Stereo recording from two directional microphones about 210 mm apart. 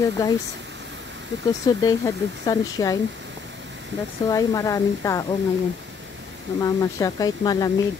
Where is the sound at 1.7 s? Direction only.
15° left (ahead or behind).